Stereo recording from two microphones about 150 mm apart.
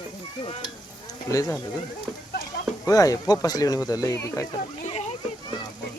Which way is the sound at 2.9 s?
25° left (ahead or behind).